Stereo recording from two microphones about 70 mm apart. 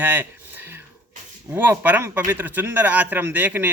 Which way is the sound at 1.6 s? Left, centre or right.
Right.